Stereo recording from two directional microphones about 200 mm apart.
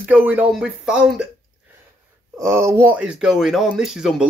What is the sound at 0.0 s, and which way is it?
Speech, 10° right (ahead or behind).